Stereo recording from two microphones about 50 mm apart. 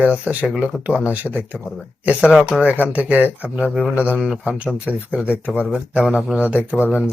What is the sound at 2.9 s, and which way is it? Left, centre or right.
Speech, right.